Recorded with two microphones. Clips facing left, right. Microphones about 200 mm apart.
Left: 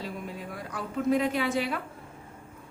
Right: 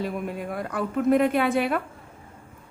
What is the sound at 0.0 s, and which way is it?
A woman's voice, 55° right (ahead or behind).